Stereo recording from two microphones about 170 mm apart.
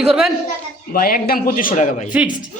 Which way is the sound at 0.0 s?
5° right (ahead or behind).